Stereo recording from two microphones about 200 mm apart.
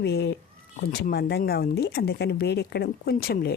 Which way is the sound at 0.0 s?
55° left (ahead or behind).